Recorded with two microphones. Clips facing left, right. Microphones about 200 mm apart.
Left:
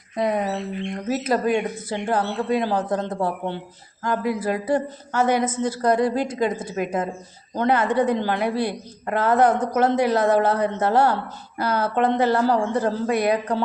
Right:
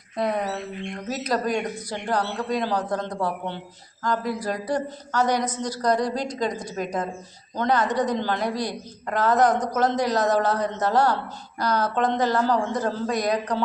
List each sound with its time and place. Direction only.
0.2 s speech: 20° left (ahead or behind)
1.2 s a woman's voice: 5° left (ahead or behind)